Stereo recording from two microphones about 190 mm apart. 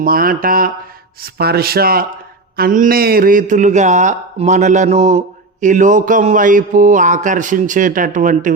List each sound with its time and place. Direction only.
0.0 s a man's voice: 50° right (ahead or behind)